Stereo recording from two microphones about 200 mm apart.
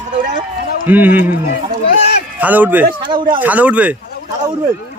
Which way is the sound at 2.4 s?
10° right (ahead or behind).